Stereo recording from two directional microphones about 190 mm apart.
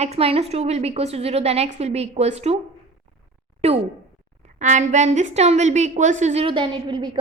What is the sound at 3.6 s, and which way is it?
A woman's voice, 35° right (ahead or behind).